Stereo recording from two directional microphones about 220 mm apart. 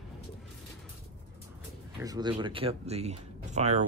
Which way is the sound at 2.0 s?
15° right (ahead or behind).